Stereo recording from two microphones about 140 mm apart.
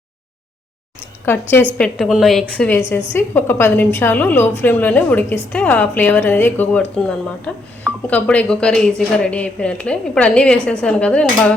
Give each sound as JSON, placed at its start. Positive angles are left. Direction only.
{"t": 1.2, "sound": "a woman's voice", "side_deg": 15}
{"t": 1.8, "sound": "a woman's voice", "side_deg": 0}
{"t": 8.0, "sound": "speech", "side_deg": 10}